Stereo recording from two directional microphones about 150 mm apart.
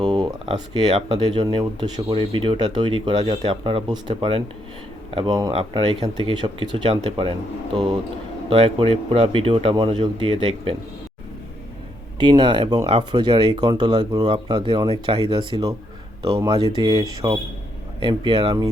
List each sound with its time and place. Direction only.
0.0 s speech: 35° right (ahead or behind)
8.4 s speech: 35° right (ahead or behind)
12.2 s speech: 30° right (ahead or behind)
18.0 s speech: 30° right (ahead or behind)